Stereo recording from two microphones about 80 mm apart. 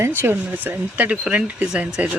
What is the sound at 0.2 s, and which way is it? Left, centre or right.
Speech, right.